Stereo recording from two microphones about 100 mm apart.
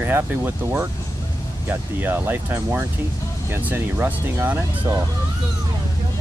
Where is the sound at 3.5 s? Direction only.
20° right (ahead or behind).